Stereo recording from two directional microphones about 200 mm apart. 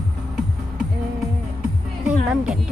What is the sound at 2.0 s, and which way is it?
Speech, 5° right (ahead or behind).